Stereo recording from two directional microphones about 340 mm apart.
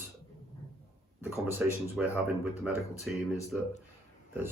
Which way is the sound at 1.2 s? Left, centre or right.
Centre.